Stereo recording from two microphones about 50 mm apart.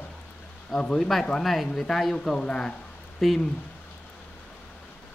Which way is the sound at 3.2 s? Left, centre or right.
Centre.